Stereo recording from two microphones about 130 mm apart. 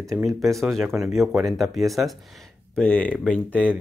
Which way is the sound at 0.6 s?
Centre (ahead or behind).